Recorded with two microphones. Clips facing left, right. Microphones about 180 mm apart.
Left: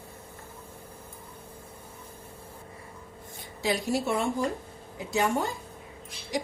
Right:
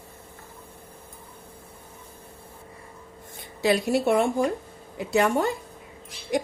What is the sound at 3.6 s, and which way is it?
A woman's voice, 65° right (ahead or behind).